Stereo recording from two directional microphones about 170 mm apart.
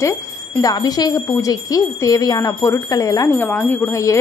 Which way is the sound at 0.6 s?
20° left (ahead or behind).